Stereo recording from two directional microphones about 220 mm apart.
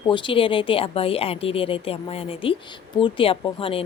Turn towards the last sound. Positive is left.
turn(degrees=25)  # may be behind; listen again after turning